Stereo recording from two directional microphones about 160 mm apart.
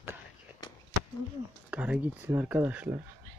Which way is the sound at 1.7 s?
10° right (ahead or behind).